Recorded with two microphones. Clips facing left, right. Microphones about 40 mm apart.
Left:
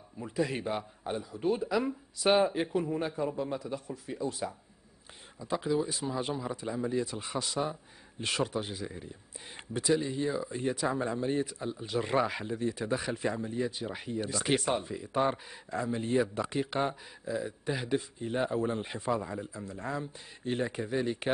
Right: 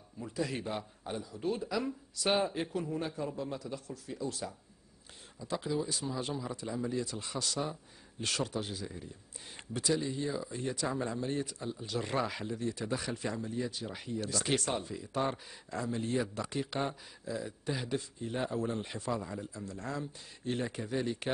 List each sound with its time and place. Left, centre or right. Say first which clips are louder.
0.2 s speech: left 4 dB; centre